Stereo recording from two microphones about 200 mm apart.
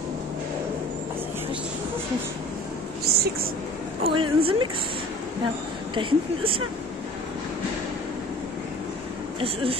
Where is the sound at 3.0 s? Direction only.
50° right (ahead or behind).